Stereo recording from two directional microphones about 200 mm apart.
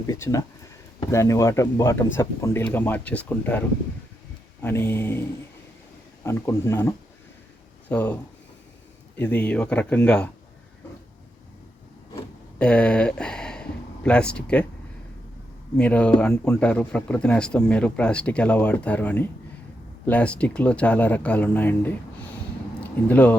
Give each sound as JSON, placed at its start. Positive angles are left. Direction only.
{"t": 0.1, "sound": "speech", "side_deg": 15}
{"t": 4.6, "sound": "speech", "side_deg": 10}
{"t": 6.2, "sound": "speech", "side_deg": 15}
{"t": 12.1, "sound": "a sound", "side_deg": 5}
{"t": 15.8, "sound": "speech", "side_deg": 5}